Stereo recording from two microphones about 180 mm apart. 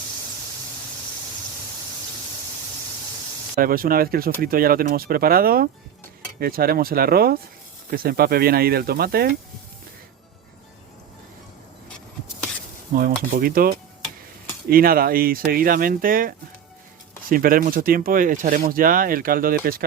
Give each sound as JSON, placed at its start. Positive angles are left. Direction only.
{"t": 3.5, "sound": "speech", "side_deg": -55}
{"t": 12.9, "sound": "sizzle", "side_deg": -50}
{"t": 13.3, "sound": "speech", "side_deg": -55}